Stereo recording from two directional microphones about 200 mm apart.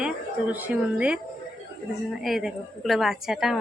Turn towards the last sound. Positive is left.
turn(degrees=0)  # may be behind; listen again after turning